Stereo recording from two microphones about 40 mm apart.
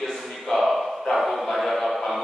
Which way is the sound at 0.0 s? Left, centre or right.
Centre.